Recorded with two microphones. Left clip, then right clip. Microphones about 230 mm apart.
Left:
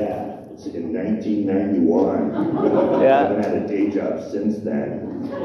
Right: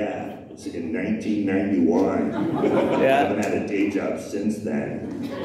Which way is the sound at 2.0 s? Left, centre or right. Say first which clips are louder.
Left 3 dB; right.